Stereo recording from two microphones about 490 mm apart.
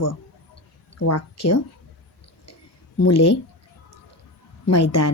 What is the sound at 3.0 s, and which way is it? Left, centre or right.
Speech, left.